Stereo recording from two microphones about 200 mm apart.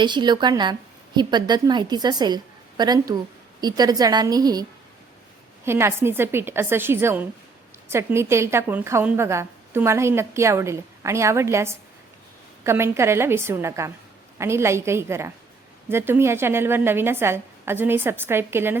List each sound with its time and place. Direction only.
0.0 s a woman's voice: 20° right (ahead or behind)
5.6 s a woman's voice: 10° right (ahead or behind)